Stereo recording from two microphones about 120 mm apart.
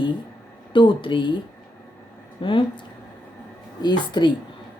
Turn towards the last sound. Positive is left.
turn(degrees=40)  # may be behind; listen again after turning